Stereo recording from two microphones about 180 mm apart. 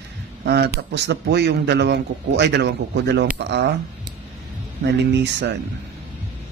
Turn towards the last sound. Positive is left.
turn(degrees=-75)  # may be behind; listen again after turning